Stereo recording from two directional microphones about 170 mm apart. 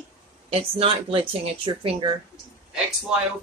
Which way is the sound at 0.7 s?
30° right (ahead or behind).